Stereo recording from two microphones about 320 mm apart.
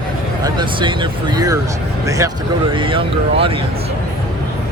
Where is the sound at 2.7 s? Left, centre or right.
Centre.